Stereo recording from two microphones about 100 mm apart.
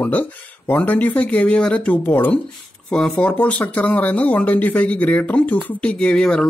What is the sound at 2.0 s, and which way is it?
Speech, 20° left (ahead or behind).